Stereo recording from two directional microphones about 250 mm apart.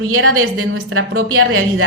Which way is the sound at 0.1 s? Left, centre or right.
Right.